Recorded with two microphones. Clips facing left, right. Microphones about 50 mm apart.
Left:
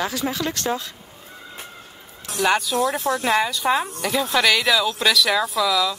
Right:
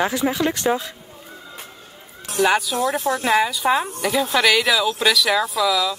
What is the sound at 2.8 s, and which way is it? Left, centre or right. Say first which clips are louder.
Speech: even; right.